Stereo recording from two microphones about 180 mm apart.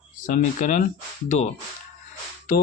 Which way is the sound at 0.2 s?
45° left (ahead or behind).